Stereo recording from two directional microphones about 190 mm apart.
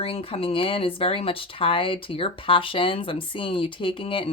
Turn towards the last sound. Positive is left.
turn(degrees=25)  # may be behind; listen again after turning